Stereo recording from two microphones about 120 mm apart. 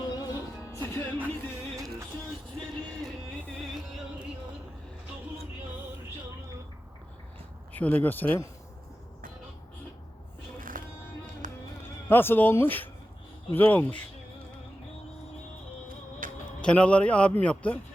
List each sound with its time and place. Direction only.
0.0 s music: 30° left (ahead or behind)
1.7 s music: 25° right (ahead or behind)
7.7 s a man's voice: 15° left (ahead or behind)
11.4 s music: 90° right
11.8 s a man's voice: 20° left (ahead or behind)
16.2 s music: 90° right
16.6 s a man's voice: 10° left (ahead or behind)